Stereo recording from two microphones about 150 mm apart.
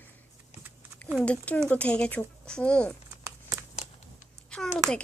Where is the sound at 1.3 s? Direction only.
10° left (ahead or behind).